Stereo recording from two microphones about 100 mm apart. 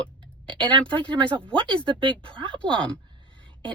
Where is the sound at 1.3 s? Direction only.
55° right (ahead or behind).